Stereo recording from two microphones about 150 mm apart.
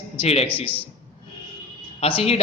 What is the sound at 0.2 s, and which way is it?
Speech, 45° left (ahead or behind).